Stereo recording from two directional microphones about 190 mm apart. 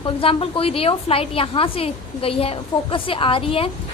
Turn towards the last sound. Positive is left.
turn(degrees=30)  # may be behind; listen again after turning